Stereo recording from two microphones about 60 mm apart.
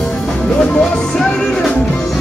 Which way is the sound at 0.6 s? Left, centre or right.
Centre.